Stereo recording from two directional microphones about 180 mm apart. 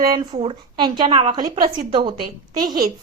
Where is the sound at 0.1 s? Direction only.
25° right (ahead or behind).